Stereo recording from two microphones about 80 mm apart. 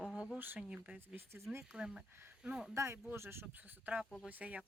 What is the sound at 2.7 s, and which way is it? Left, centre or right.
Speech, right.